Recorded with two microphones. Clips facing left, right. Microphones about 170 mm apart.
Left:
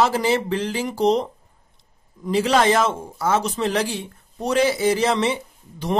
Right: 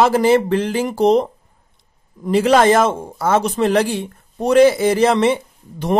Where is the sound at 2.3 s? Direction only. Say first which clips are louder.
Right 5 dB; 55° right (ahead or behind).